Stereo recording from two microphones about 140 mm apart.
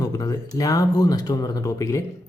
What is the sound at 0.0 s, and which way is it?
Speech, 25° left (ahead or behind).